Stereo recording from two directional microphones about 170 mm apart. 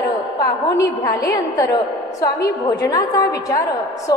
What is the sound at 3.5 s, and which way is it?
Speech, 20° left (ahead or behind).